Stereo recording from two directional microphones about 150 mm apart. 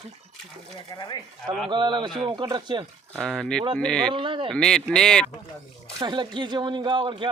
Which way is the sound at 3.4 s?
5° left (ahead or behind).